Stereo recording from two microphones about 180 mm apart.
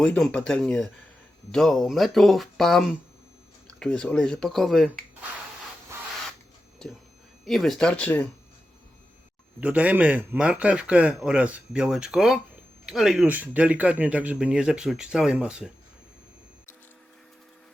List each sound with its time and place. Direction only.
0.0 s speech: 5° left (ahead or behind)
7.4 s speech: centre (ahead or behind)
9.6 s a man's voice: 5° right (ahead or behind)